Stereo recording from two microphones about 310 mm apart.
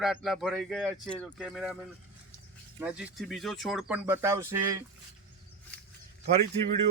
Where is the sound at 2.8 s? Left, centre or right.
Centre.